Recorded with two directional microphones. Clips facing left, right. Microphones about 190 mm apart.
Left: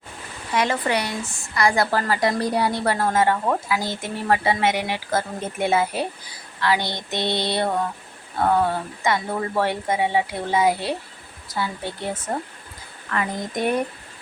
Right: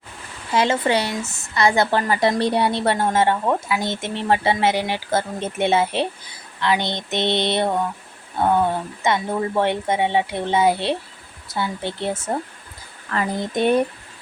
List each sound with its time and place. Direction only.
0.5 s a woman's voice: 25° right (ahead or behind)